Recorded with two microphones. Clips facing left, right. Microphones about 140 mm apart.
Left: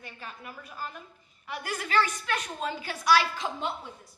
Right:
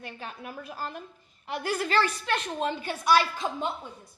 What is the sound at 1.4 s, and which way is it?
Speech, 30° right (ahead or behind).